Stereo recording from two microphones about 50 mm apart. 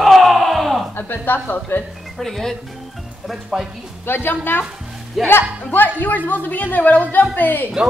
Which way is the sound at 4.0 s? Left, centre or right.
Left.